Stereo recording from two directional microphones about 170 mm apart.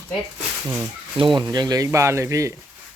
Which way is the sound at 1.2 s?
30° right (ahead or behind).